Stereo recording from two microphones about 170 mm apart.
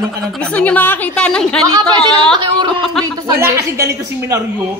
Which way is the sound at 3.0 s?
20° right (ahead or behind).